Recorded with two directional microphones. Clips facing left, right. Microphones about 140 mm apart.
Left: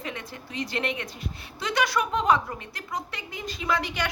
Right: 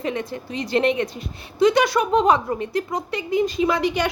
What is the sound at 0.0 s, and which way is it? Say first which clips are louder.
A woman's voice: right 10 dB; 25° right (ahead or behind).